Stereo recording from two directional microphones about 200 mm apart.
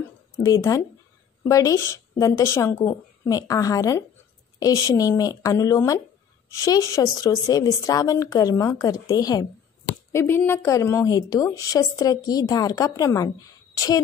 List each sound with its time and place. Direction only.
0.4 s a woman's voice: 15° left (ahead or behind)